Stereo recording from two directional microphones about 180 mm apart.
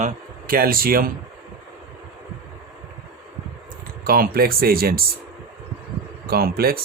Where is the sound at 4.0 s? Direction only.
55° right (ahead or behind).